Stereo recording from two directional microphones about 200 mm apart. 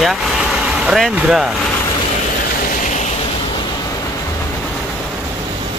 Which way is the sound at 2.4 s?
45° left (ahead or behind).